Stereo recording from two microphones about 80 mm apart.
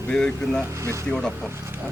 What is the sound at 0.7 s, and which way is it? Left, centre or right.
Speech, right.